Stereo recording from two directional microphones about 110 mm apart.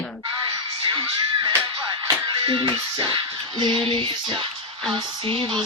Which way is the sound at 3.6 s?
45° right (ahead or behind).